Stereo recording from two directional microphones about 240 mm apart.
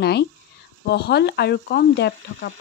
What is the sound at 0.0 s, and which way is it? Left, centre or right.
Speech, left.